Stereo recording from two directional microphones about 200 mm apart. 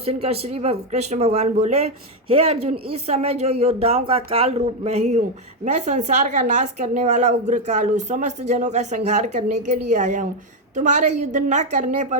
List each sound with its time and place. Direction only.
0.0 s a woman's voice: 30° right (ahead or behind)